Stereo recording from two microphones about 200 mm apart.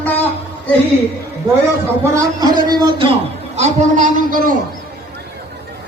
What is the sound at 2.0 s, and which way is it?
Speech, 15° right (ahead or behind).